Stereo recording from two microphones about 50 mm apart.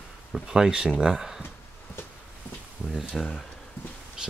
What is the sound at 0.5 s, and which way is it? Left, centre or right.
Speech, centre.